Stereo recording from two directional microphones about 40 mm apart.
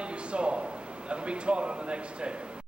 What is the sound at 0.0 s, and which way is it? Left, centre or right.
A man's voice, right.